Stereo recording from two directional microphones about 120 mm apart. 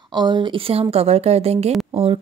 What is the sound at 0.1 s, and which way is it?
A woman's voice, 40° right (ahead or behind).